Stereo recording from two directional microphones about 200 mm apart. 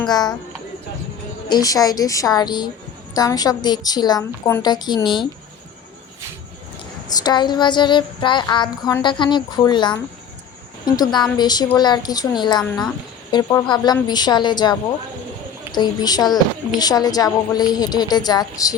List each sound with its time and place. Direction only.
0.0 s speech: 20° left (ahead or behind)
1.5 s speech: 20° left (ahead or behind)
7.2 s speech: 20° left (ahead or behind)